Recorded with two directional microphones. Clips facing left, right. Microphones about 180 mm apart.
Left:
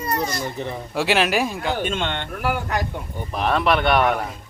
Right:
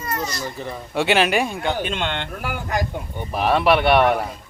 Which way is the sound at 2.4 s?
55° left (ahead or behind).